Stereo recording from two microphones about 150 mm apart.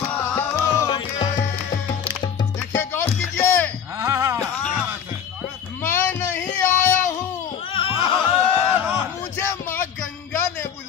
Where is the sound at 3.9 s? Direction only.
20° right (ahead or behind).